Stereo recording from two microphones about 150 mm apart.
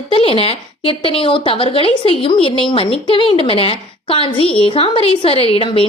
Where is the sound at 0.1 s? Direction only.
40° left (ahead or behind).